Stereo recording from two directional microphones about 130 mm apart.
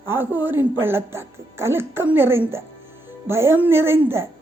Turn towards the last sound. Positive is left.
turn(degrees=-20)  # may be behind; listen again after turning